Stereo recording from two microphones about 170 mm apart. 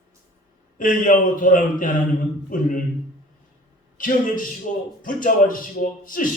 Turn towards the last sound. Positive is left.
turn(degrees=55)  # may be behind; listen again after turning